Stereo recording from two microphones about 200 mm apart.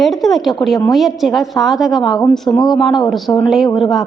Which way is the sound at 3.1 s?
Centre (ahead or behind).